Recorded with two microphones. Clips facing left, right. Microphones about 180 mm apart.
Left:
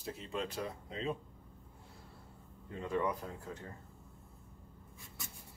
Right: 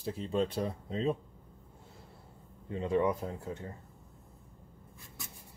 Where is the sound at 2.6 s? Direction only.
25° right (ahead or behind).